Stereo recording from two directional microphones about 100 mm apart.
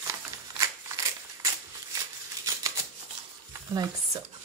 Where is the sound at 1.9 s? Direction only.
35° right (ahead or behind).